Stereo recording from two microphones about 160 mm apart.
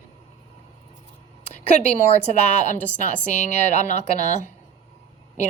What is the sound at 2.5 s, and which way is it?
A woman's voice, 50° left (ahead or behind).